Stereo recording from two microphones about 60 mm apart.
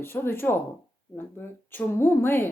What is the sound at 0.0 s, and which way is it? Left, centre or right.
A woman's voice, left.